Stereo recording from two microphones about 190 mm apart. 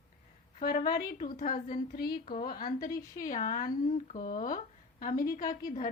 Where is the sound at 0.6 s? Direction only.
50° left (ahead or behind).